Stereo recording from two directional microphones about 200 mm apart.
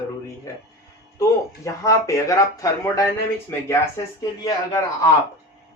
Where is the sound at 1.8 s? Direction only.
15° left (ahead or behind).